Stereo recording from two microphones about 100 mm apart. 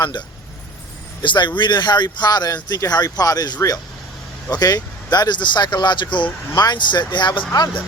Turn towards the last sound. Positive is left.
turn(degrees=50)  # may be behind; listen again after turning